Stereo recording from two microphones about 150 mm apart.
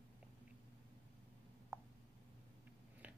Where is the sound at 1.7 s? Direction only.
20° right (ahead or behind).